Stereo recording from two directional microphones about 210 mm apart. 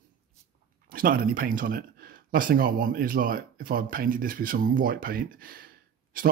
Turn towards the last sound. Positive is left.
turn(degrees=-45)  # may be behind; listen again after turning